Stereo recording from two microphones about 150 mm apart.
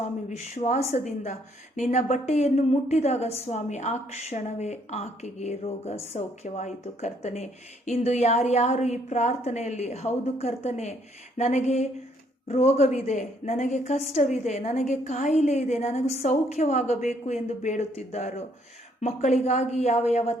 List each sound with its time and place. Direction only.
0.3 s a woman's voice: 50° left (ahead or behind)